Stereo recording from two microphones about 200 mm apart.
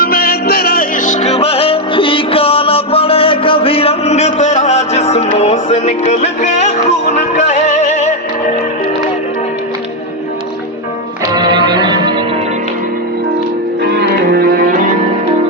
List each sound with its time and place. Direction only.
0.0 s music: 50° left (ahead or behind)
11.3 s music: 20° right (ahead or behind)
13.9 s music: 50° right (ahead or behind)